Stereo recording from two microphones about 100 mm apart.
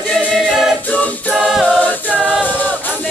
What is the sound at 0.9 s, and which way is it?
A capella, 15° left (ahead or behind).